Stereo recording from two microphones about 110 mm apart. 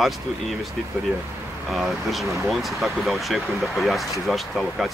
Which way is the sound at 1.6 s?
Centre (ahead or behind).